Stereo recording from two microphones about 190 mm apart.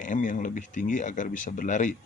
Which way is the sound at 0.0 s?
40° left (ahead or behind).